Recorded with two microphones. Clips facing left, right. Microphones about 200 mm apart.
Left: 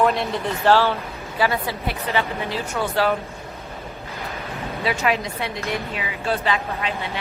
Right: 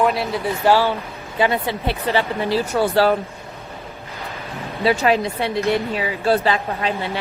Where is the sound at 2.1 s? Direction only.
35° right (ahead or behind).